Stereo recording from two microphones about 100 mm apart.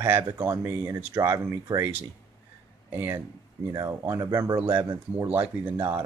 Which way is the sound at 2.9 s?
25° right (ahead or behind).